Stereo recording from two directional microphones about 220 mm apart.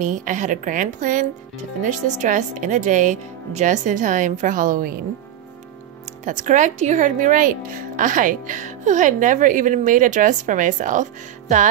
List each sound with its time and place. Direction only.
0.0 s speech: 35° right (ahead or behind)
6.2 s speech: 35° right (ahead or behind)